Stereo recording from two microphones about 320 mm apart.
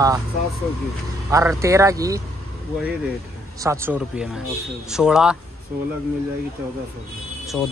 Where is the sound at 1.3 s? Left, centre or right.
Centre.